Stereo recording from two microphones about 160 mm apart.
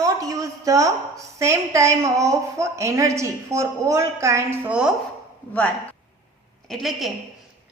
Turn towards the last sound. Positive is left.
turn(degrees=0)  # may be behind; listen again after turning